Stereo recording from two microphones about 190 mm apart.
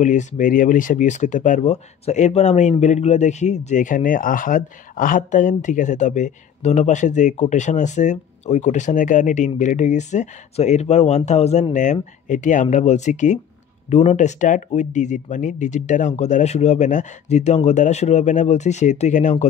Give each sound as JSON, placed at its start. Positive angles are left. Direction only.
{"t": 0.0, "sound": "speech", "side_deg": 40}